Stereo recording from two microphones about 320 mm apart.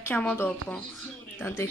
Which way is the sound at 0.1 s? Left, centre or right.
Centre.